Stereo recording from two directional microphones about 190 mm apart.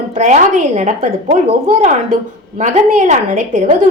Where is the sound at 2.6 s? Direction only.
40° right (ahead or behind).